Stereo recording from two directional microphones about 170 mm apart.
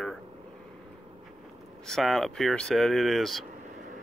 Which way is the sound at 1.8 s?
Centre (ahead or behind).